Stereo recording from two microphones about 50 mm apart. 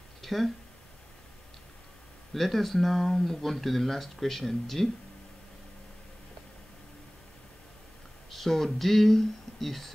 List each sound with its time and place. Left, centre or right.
0.2 s a sound: centre
2.3 s speech: centre
8.3 s speech: centre